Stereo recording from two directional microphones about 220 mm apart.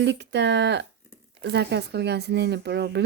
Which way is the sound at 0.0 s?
50° right (ahead or behind).